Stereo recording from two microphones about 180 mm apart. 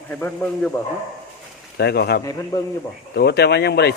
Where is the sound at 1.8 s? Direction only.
65° left (ahead or behind).